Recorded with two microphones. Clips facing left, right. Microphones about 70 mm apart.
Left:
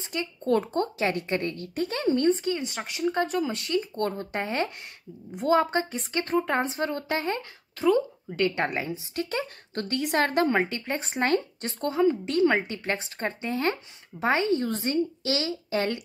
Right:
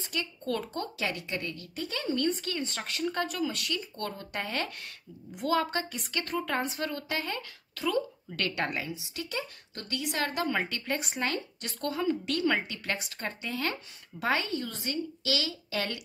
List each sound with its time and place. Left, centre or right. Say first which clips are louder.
0.0 s a woman's voice: left 4 dB; left
10.5 s a woman's voice: left 5 dB; left